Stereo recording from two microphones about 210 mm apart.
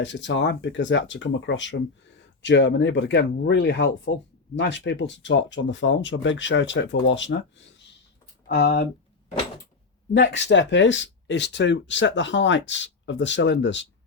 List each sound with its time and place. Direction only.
0.0 s speech: 60° left (ahead or behind)
8.4 s speech: 55° left (ahead or behind)
10.2 s speech: 55° left (ahead or behind)